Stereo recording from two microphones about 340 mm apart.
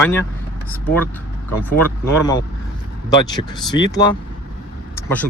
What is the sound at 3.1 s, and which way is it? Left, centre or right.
Speech, centre.